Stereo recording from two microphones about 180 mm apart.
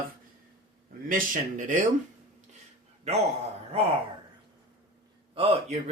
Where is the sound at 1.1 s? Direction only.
45° right (ahead or behind).